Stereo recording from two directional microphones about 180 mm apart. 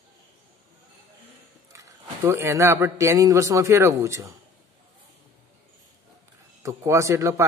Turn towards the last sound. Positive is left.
turn(degrees=-15)  # may be behind; listen again after turning